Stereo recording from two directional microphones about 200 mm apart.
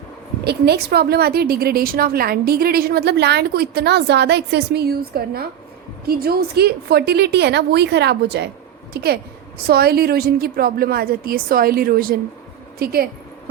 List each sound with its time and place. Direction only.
0.4 s a woman's voice: 55° right (ahead or behind)